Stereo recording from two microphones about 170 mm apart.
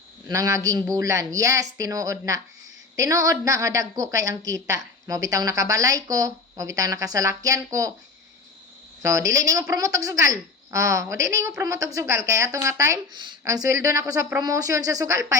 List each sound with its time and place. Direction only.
0.3 s a woman's voice: 20° right (ahead or behind)
9.0 s a woman's voice: 20° right (ahead or behind)